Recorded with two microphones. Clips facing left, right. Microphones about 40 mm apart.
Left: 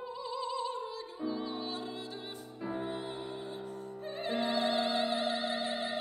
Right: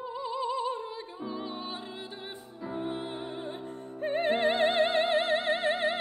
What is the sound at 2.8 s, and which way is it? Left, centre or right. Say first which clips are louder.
Music: right 3 dB; right.